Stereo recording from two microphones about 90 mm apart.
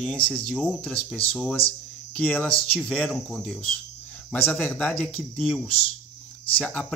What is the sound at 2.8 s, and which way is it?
Speech, 10° left (ahead or behind).